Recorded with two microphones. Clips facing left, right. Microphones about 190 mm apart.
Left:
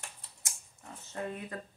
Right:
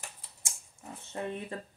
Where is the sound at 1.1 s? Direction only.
25° right (ahead or behind).